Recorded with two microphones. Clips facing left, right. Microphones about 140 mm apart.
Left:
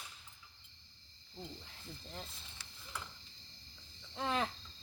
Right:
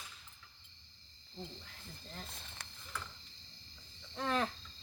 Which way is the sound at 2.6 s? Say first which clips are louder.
Right 5 dB; 55° right (ahead or behind).